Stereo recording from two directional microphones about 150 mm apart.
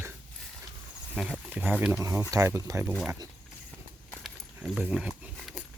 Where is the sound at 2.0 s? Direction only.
20° right (ahead or behind).